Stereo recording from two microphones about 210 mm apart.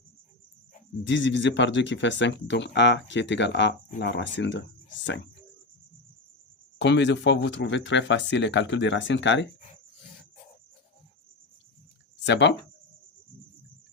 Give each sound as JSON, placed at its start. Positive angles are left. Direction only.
{"t": 1.0, "sound": "speech", "side_deg": 60}
{"t": 6.7, "sound": "speech", "side_deg": 55}
{"t": 12.2, "sound": "speech", "side_deg": 55}